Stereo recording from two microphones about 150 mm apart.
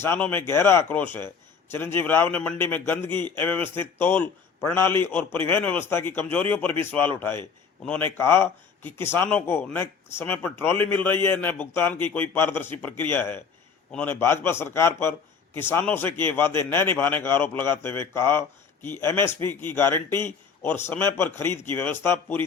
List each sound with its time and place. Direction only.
0.0 s speech: 15° left (ahead or behind)